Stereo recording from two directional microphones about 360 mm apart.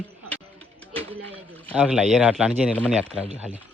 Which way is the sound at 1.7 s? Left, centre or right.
Centre.